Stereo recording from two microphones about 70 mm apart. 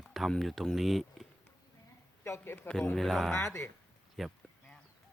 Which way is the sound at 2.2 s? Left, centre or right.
Left.